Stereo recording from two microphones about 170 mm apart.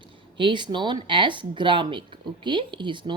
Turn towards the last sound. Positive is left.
turn(degrees=-30)  # may be behind; listen again after turning